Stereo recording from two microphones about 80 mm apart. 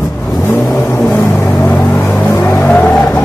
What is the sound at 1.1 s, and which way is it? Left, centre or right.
Vehicle, left.